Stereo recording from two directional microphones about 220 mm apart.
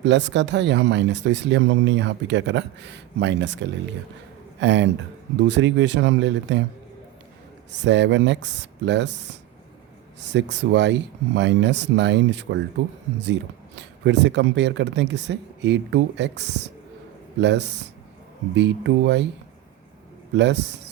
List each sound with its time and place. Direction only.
0.0 s speech: 55° right (ahead or behind)
7.7 s speech: 55° right (ahead or behind)
20.3 s a man's voice: 50° right (ahead or behind)